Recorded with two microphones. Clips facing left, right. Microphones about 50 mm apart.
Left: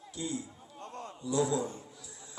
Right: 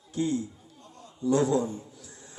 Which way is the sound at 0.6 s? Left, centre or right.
Left.